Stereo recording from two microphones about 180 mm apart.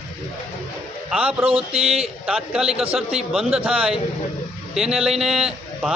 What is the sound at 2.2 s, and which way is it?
A man's voice, 5° right (ahead or behind).